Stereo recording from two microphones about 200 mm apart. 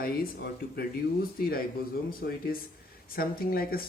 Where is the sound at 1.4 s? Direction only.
50° left (ahead or behind).